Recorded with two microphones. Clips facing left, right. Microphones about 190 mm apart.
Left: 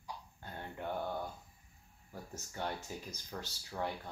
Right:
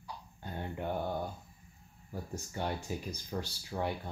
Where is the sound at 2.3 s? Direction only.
15° right (ahead or behind).